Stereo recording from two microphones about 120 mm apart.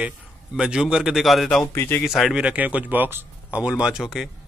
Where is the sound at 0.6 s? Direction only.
5° right (ahead or behind).